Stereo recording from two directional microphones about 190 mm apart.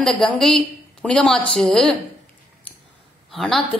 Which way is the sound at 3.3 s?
Centre (ahead or behind).